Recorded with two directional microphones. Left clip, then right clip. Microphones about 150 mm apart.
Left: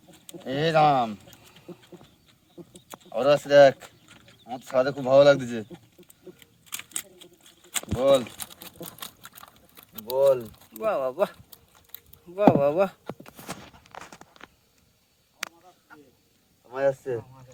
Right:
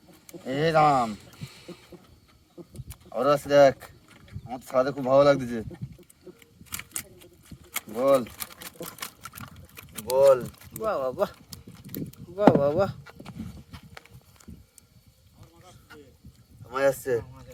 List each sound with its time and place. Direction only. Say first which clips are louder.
0.4 s speech: even; 5° right (ahead or behind)
3.1 s speech: left 2 dB; centre (ahead or behind)
6.4 s a sound: even; centre (ahead or behind)
9.7 s speech: right 3 dB; 5° right (ahead or behind)
16.7 s speech: right 1 dB; 15° right (ahead or behind)